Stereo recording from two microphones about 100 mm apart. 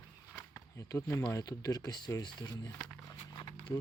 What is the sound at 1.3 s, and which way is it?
Speech, 35° left (ahead or behind).